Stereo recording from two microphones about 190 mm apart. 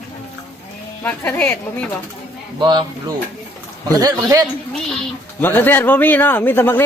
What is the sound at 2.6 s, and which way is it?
Speech, 25° right (ahead or behind).